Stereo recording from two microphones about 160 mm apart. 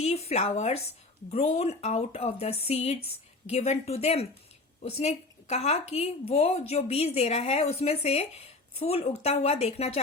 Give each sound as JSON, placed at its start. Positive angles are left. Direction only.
{"t": 0.0, "sound": "a woman's voice", "side_deg": 40}